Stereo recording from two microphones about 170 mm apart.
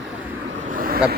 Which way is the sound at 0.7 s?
55° right (ahead or behind).